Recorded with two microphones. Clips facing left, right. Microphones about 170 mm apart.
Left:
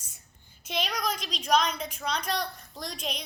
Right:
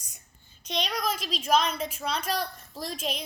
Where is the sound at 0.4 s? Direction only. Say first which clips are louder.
Right 1 dB; 5° left (ahead or behind).